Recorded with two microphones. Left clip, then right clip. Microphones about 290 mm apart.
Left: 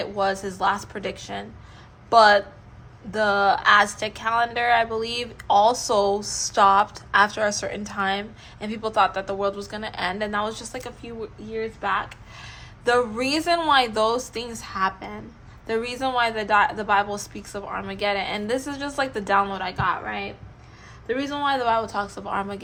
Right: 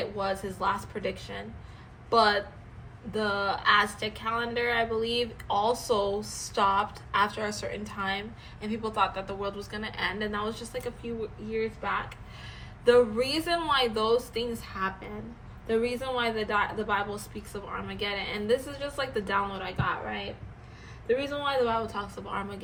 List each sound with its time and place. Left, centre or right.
0.6 s a woman's voice: left
3.2 s a woman's voice: left